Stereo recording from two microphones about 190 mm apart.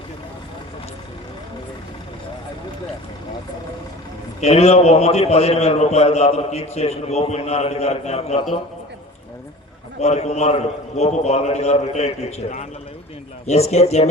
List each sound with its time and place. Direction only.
4.4 s a man's voice: 35° left (ahead or behind)
10.0 s a man's voice: 35° left (ahead or behind)